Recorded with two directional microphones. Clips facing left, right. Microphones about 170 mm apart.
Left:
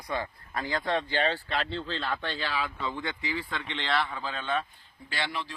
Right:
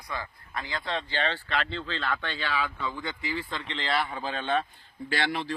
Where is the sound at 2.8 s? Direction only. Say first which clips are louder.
Even; 25° left (ahead or behind).